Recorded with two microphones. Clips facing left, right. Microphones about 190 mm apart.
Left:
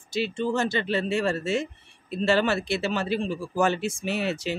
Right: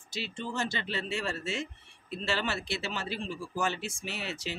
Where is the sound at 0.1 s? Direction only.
60° left (ahead or behind).